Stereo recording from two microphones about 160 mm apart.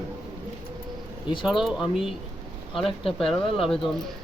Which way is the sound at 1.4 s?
5° right (ahead or behind).